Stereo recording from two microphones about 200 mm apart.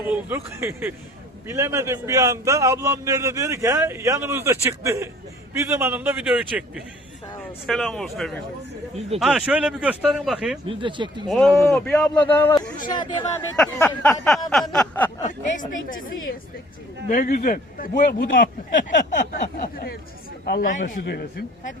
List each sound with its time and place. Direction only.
0.1 s a man's voice: 10° right (ahead or behind)
10.7 s speech: 25° right (ahead or behind)
11.3 s speech: centre (ahead or behind)
12.9 s speech: 25° left (ahead or behind)
13.7 s speech: 10° left (ahead or behind)
15.9 s a man's voice: 45° left (ahead or behind)